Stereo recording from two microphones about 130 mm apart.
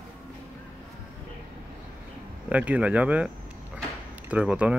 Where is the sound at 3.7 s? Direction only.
10° right (ahead or behind).